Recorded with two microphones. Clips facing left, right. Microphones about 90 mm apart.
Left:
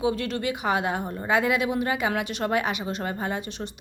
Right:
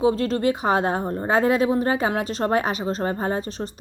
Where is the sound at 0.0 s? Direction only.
35° right (ahead or behind).